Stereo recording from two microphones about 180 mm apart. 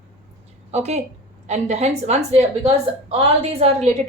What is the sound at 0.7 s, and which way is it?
A woman's voice, 40° right (ahead or behind).